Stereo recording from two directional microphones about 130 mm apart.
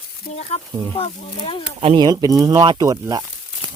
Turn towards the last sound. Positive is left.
turn(degrees=-30)  # may be behind; listen again after turning